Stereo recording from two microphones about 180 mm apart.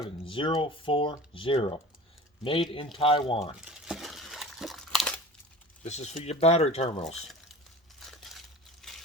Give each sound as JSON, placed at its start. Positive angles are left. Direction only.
{"t": 0.3, "sound": "speech", "side_deg": 30}
{"t": 3.6, "sound": "crumpling", "side_deg": -5}
{"t": 5.8, "sound": "speech", "side_deg": 40}
{"t": 8.8, "sound": "a sound", "side_deg": 0}